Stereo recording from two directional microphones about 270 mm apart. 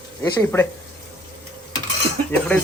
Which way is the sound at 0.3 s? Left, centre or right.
Centre.